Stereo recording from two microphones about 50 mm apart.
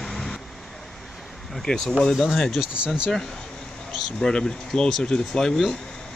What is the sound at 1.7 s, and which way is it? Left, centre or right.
Speech, centre.